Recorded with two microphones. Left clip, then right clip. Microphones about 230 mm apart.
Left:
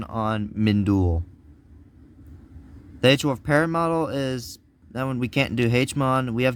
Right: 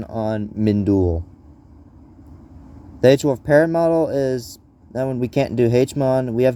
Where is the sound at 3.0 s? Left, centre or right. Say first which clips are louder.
Right 5 dB; left.